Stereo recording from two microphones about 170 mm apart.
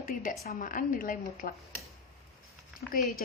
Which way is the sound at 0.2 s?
55° left (ahead or behind).